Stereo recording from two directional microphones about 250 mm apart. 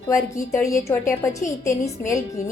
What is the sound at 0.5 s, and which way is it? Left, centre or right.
Speech, centre.